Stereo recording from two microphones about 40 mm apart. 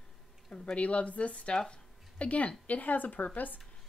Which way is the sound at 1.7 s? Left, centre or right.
Left.